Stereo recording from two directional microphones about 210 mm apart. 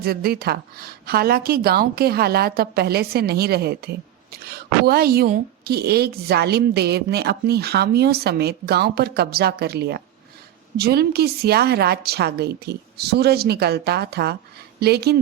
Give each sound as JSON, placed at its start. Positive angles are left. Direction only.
{"t": 0.0, "sound": "a woman's voice", "side_deg": -45}